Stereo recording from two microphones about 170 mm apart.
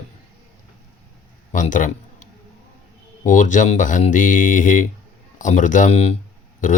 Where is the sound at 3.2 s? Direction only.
50° left (ahead or behind).